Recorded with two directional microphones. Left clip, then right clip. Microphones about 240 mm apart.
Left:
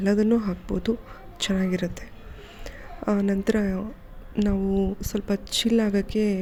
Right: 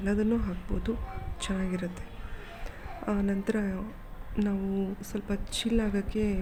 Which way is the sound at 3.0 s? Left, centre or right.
Left.